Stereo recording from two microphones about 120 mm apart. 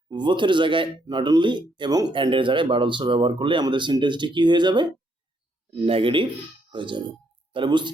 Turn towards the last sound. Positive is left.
turn(degrees=-40)  # may be behind; listen again after turning